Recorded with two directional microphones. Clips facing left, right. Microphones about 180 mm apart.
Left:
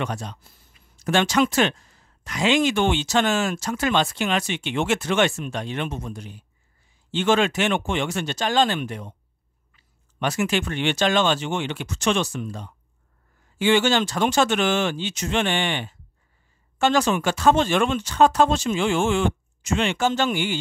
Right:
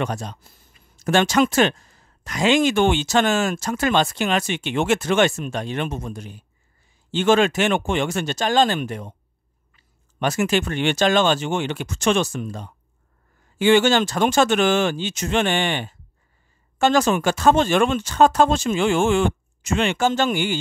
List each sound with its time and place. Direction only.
0.0 s speech: 45° right (ahead or behind)